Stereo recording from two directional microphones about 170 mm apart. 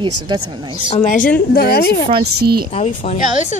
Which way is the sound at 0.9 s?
50° left (ahead or behind).